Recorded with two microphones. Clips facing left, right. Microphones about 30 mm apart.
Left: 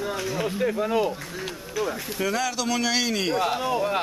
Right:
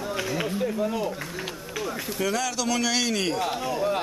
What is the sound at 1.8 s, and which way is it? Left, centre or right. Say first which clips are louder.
A man's voice: left 1 dB; centre.